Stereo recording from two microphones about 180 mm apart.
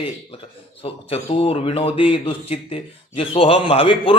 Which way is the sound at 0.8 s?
30° left (ahead or behind).